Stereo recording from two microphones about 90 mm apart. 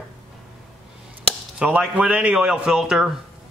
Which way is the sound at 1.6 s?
10° right (ahead or behind).